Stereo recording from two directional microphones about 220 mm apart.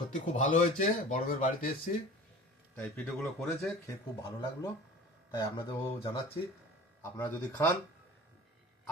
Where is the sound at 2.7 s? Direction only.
5° left (ahead or behind).